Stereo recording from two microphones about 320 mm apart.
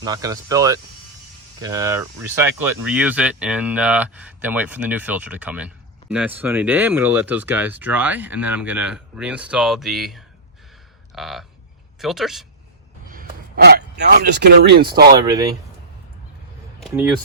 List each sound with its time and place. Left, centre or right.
0.0 s speech: centre
11.1 s a sound: centre
11.9 s speech: centre
13.1 s speech: right
16.8 s speech: centre